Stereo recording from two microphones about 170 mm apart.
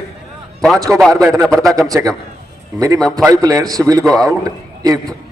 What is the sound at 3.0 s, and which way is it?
Speech, 5° left (ahead or behind).